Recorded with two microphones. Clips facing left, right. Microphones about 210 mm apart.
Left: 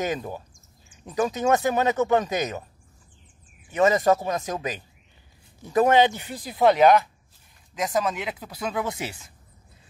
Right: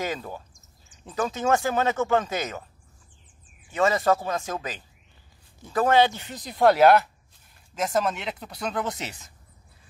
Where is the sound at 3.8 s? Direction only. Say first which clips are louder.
Left 3 dB; 20° left (ahead or behind).